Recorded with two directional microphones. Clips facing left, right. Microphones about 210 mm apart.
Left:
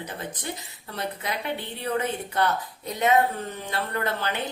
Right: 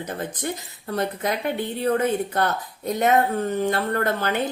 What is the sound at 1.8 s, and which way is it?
Speech, 45° right (ahead or behind).